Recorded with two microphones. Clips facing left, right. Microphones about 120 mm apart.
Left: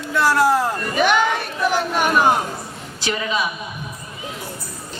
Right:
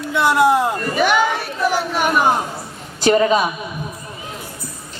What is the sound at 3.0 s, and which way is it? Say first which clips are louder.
Speech: right 9 dB; 40° right (ahead or behind).